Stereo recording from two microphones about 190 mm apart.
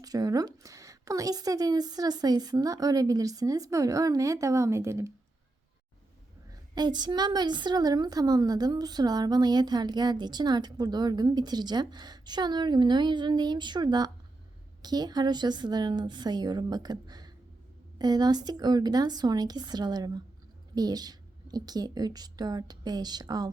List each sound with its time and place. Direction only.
0.0 s a woman's voice: 20° right (ahead or behind)
6.5 s a woman's voice: 20° right (ahead or behind)